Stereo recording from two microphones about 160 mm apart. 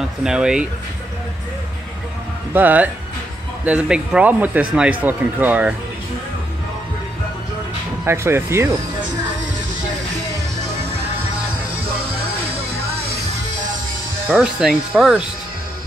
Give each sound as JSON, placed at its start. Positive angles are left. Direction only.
{"t": 0.2, "sound": "speech", "side_deg": -5}
{"t": 2.5, "sound": "speech", "side_deg": -10}
{"t": 8.0, "sound": "speech", "side_deg": -15}
{"t": 14.3, "sound": "speech", "side_deg": -5}